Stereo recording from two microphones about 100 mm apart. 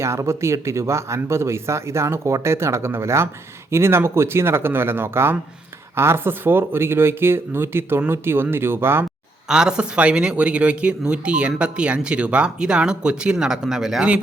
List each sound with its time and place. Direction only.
0.0 s speech: 30° right (ahead or behind)
9.5 s speech: 5° right (ahead or behind)